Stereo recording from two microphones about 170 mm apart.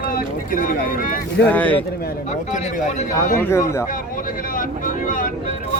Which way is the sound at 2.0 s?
45° left (ahead or behind).